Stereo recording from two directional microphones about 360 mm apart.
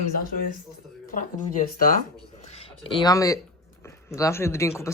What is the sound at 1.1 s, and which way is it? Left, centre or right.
Speech, left.